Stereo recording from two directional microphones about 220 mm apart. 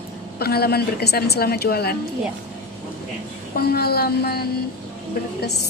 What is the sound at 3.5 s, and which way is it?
A woman's voice, 45° left (ahead or behind).